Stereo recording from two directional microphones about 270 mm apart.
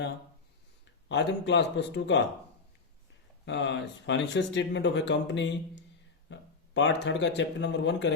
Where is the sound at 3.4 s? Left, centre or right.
Left.